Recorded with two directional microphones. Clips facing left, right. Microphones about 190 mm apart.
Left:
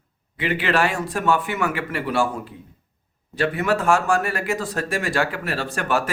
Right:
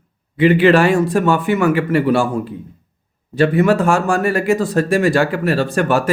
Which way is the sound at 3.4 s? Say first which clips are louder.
Right 8 dB; 30° right (ahead or behind).